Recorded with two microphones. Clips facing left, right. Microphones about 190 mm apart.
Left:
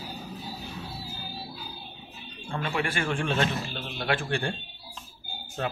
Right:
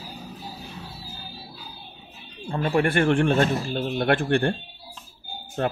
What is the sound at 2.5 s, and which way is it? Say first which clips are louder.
Speech: right 8 dB; 45° right (ahead or behind).